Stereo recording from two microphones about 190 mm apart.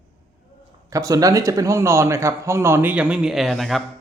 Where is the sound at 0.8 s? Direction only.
15° right (ahead or behind); by 3.8 s centre (ahead or behind).